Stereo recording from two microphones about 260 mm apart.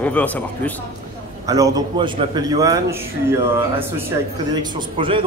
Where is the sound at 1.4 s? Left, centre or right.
Centre.